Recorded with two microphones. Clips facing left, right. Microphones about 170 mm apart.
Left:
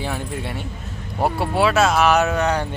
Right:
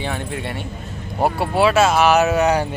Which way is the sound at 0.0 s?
5° left (ahead or behind).